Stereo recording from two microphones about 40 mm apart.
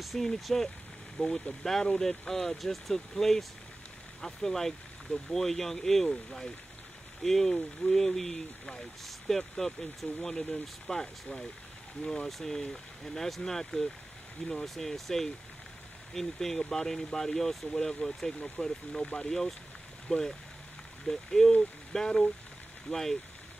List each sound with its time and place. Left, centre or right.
0.0 s speech: centre
1.2 s speech: left
1.6 s speech: centre
12.3 s speech: centre
20.1 s speech: left
21.0 s speech: centre